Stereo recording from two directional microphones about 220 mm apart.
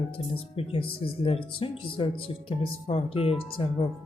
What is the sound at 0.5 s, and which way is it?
Speech, 25° left (ahead or behind).